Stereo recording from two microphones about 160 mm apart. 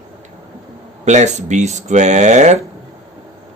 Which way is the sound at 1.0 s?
45° right (ahead or behind).